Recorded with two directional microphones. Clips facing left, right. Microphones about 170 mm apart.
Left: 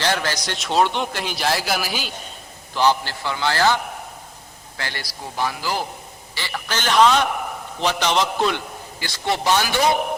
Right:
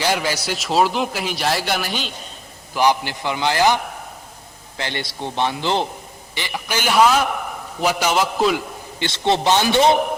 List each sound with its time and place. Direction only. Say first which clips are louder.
0.0 s a man's voice: right 2 dB; 10° right (ahead or behind); by 2.1 s 5° left (ahead or behind)
2.7 s a man's voice: right 1 dB; 15° right (ahead or behind)
4.8 s a man's voice: right 5 dB; 20° right (ahead or behind)
6.3 s a man's voice: right 2 dB; 15° right (ahead or behind)
9.0 s a man's voice: right 5 dB; 25° right (ahead or behind)